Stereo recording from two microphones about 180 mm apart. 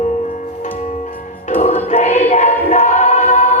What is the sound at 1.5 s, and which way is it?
Music, 35° left (ahead or behind).